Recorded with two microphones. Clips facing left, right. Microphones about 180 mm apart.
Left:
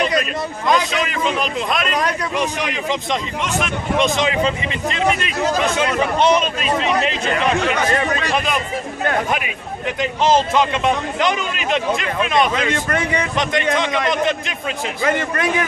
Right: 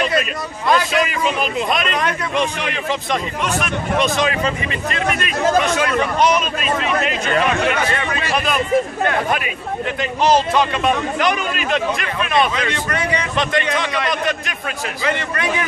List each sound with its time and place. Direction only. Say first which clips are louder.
0.9 s a man's voice: right 2 dB; 5° right (ahead or behind)
2.3 s a man's voice: right 1 dB; 15° left (ahead or behind)
7.9 s speech: left 3 dB; 40° left (ahead or behind)
10.2 s speech: even; 20° left (ahead or behind)
12.7 s a man's voice: left 1 dB; 50° left (ahead or behind)
13.4 s speech: left 1 dB; 20° left (ahead or behind)
15.0 s a man's voice: left 2 dB; 45° left (ahead or behind)